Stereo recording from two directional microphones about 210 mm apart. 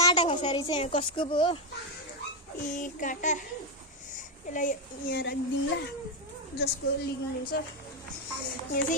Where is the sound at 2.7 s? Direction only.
40° left (ahead or behind).